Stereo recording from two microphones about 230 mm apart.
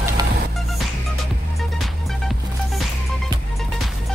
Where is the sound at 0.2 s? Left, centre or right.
Centre.